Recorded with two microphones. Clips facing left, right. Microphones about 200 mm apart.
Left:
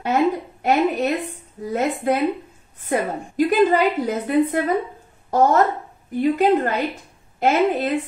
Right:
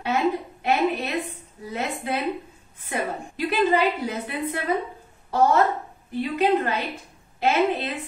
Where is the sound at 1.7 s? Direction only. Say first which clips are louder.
Left 7 dB; 45° left (ahead or behind).